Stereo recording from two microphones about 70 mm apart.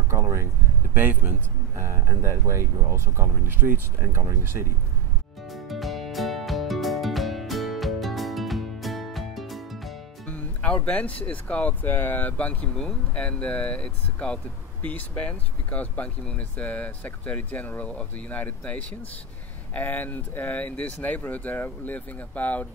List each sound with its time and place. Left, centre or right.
0.1 s a sound: right
0.9 s speech: right
1.8 s speech: right
5.5 s music: centre
10.2 s music: centre
10.9 s speech: centre